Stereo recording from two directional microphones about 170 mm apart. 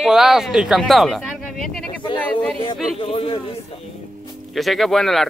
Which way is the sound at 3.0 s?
35° left (ahead or behind).